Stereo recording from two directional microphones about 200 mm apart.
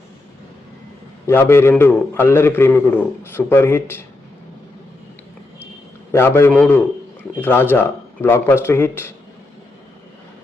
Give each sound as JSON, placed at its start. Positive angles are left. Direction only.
{"t": 1.3, "sound": "a man's voice", "side_deg": 10}
{"t": 6.1, "sound": "a man's voice", "side_deg": 10}